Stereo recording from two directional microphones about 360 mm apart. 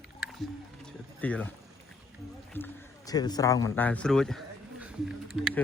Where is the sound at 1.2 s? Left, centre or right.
Centre.